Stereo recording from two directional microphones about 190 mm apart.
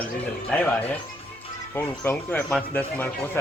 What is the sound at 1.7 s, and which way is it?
A man's voice, 10° left (ahead or behind).